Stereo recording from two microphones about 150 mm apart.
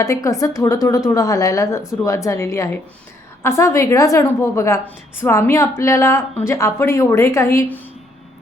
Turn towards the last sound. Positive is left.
turn(degrees=20)  # may be behind; listen again after turning